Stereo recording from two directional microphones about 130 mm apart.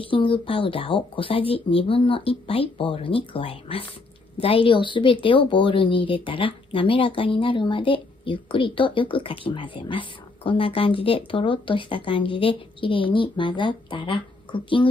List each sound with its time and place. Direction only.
0.0 s a woman's voice: 40° left (ahead or behind)